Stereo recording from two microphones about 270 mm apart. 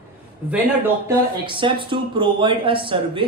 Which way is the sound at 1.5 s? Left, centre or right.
Centre.